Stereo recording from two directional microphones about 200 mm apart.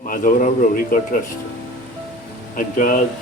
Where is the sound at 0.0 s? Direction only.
40° left (ahead or behind).